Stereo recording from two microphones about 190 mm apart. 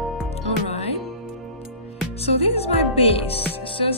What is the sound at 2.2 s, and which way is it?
Music, 30° left (ahead or behind).